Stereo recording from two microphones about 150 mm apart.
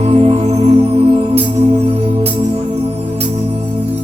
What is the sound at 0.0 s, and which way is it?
Music, 45° right (ahead or behind).